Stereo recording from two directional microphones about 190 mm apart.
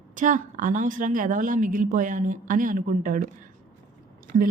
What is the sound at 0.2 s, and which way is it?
Speech, 45° right (ahead or behind).